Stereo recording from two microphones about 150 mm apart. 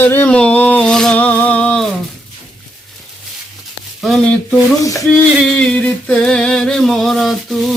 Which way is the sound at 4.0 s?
Centre (ahead or behind).